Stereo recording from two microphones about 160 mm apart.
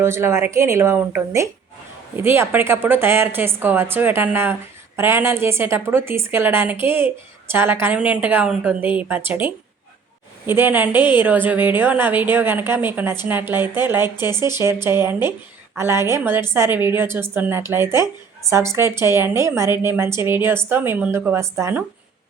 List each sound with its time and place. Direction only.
0.0 s a woman's voice: 15° right (ahead or behind)